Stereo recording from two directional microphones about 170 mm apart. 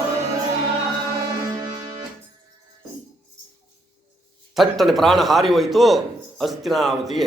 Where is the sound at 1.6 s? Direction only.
25° right (ahead or behind).